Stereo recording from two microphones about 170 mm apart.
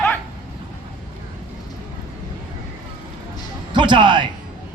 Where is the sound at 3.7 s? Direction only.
25° right (ahead or behind).